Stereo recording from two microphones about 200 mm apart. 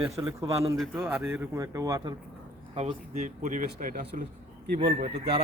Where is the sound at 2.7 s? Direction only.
35° right (ahead or behind).